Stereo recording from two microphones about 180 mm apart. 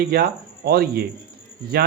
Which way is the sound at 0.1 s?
60° right (ahead or behind).